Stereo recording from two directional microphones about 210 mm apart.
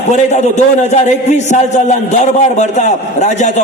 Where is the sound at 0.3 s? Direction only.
35° left (ahead or behind).